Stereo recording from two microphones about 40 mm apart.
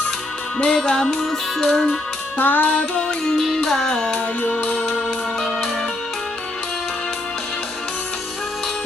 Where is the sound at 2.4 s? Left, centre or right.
Left.